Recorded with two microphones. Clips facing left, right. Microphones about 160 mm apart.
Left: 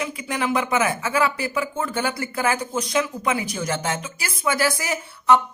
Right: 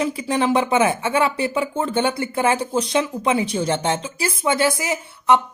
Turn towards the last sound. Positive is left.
turn(degrees=-20)  # may be behind; listen again after turning